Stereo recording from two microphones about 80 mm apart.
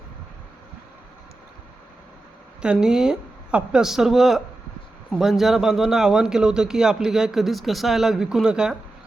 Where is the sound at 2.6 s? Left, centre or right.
Centre.